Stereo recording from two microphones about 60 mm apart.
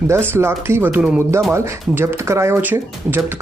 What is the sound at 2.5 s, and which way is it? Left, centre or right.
Speech, right.